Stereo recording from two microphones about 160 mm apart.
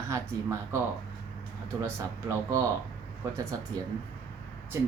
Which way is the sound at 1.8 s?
20° right (ahead or behind).